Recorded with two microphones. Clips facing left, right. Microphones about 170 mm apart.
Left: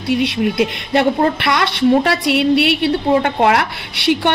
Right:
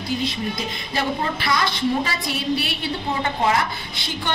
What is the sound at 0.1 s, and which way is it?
A woman's voice, 70° left (ahead or behind).